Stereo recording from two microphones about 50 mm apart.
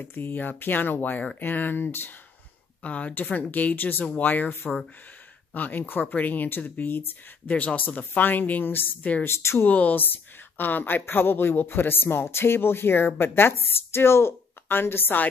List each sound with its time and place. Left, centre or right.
0.0 s speech: left
2.8 s speech: left
9.2 s speech: left
9.6 s speech: left